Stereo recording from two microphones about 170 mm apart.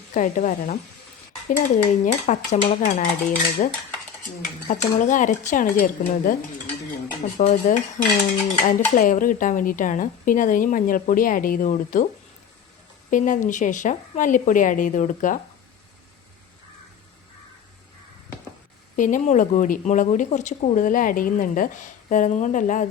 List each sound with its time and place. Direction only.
0.1 s speech: 50° left (ahead or behind)
4.7 s speech: 45° left (ahead or behind)
7.3 s speech: 40° left (ahead or behind)
13.1 s speech: 50° left (ahead or behind)
18.9 s speech: 50° left (ahead or behind)